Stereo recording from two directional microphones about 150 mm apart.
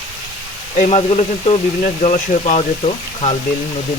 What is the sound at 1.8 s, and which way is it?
Speech, 60° left (ahead or behind).